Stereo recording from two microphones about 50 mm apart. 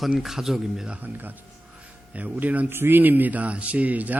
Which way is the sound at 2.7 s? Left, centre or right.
Right.